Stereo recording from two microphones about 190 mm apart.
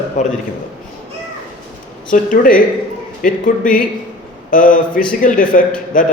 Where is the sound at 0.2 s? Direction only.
40° left (ahead or behind).